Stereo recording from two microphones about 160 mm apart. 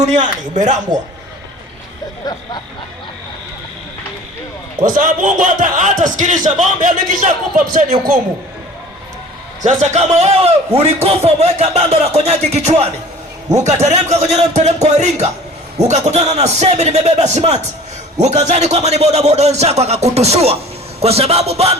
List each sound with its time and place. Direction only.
0.0 s a man's voice: 50° right (ahead or behind)
4.8 s a man's voice: 55° right (ahead or behind)
9.6 s a man's voice: 45° right (ahead or behind)